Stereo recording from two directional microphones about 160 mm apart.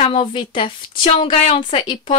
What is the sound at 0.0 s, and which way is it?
Speech, 35° left (ahead or behind).